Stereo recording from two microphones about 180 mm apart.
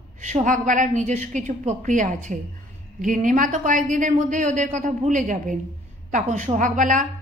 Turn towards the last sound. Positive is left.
turn(degrees=-45)  # may be behind; listen again after turning